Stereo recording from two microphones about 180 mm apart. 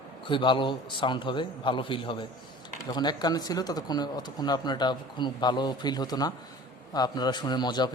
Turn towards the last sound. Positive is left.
turn(degrees=25)  # may be behind; listen again after turning